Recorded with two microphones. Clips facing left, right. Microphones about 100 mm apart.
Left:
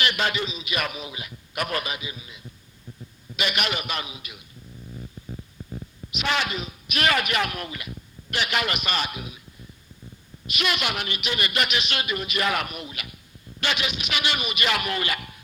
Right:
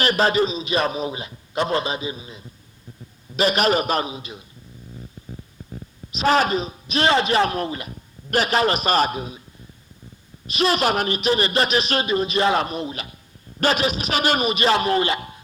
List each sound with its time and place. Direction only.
0.0 s a man's voice: 35° right (ahead or behind)
6.1 s a man's voice: 35° right (ahead or behind)
10.4 s a man's voice: 35° right (ahead or behind)